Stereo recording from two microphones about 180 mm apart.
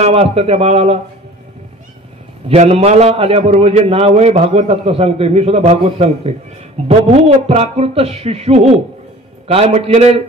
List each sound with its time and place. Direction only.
0.0 s a man's voice: 35° right (ahead or behind)
2.4 s a man's voice: 35° right (ahead or behind)